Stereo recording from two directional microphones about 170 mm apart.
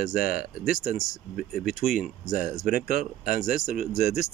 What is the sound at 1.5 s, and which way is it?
Speech, centre (ahead or behind).